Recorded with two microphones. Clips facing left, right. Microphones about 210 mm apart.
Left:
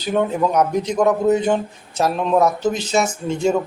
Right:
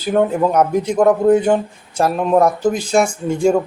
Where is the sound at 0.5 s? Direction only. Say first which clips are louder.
Right 3 dB; 10° right (ahead or behind).